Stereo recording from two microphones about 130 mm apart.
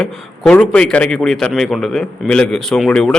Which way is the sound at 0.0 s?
5° left (ahead or behind).